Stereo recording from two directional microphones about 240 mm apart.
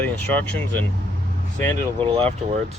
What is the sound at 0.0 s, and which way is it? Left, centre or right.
Speech, centre.